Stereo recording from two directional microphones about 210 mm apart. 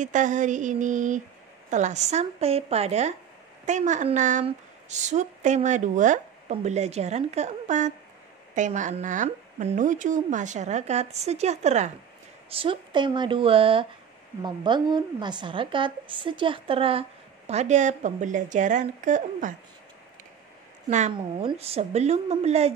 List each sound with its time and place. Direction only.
0.0 s a woman's voice: 35° right (ahead or behind)
20.9 s a woman's voice: 35° right (ahead or behind)